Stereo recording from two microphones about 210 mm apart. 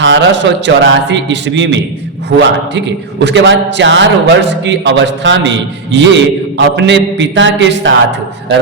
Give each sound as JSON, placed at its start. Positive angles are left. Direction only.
{"t": 0.0, "sound": "a man's voice", "side_deg": -60}